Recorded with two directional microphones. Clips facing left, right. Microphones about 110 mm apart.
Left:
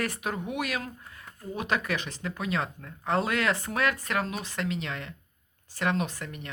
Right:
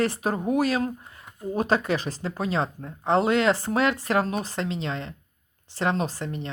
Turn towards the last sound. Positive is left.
turn(degrees=-30)  # may be behind; listen again after turning